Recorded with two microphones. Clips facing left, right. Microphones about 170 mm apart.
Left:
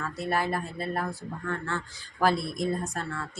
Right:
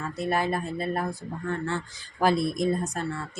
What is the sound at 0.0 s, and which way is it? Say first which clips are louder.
A woman's voice: right 2 dB; 20° right (ahead or behind).